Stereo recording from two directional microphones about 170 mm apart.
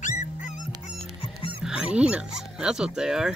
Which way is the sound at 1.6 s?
5° right (ahead or behind).